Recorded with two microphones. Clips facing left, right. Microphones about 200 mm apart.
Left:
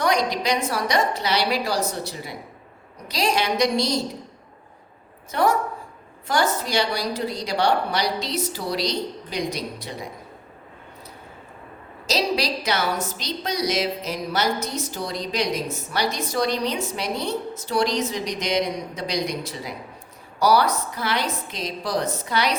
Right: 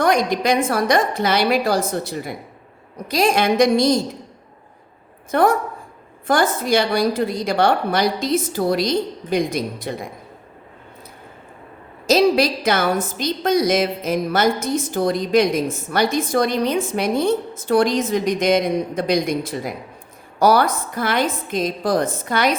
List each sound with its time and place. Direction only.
0.0 s a woman's voice: 50° right (ahead or behind)
5.3 s a woman's voice: 55° right (ahead or behind)
12.0 s a woman's voice: 50° right (ahead or behind)